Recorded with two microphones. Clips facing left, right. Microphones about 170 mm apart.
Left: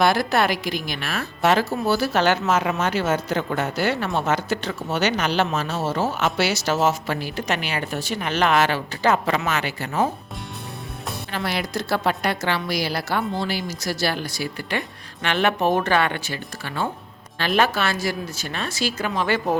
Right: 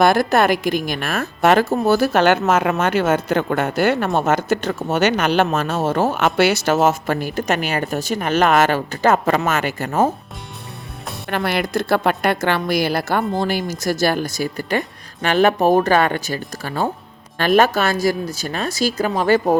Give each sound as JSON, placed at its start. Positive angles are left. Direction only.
{"t": 0.0, "sound": "a woman's voice", "side_deg": -50}
{"t": 11.3, "sound": "a woman's voice", "side_deg": -60}